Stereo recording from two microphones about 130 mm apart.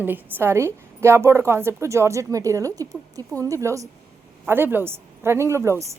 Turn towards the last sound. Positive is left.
turn(degrees=-20)  # may be behind; listen again after turning